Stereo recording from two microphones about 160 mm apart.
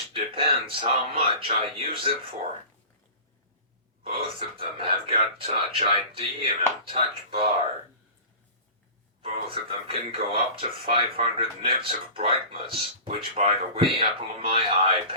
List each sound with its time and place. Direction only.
0.1 s speech: 35° right (ahead or behind)
4.0 s speech: 35° right (ahead or behind)
9.2 s speech: 35° right (ahead or behind)